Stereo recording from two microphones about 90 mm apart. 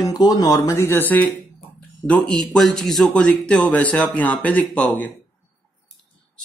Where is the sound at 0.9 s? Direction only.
20° left (ahead or behind).